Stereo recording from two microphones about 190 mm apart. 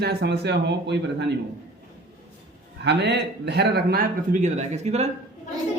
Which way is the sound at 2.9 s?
65° right (ahead or behind).